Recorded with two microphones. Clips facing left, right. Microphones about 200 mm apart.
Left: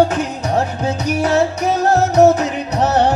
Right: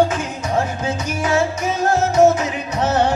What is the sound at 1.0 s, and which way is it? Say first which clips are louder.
Music: left 4 dB; 65° left (ahead or behind).